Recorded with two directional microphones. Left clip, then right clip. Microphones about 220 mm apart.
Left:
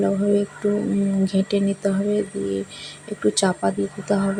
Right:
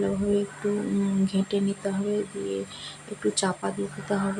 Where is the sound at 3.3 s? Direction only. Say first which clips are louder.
Left 7 dB; 15° left (ahead or behind).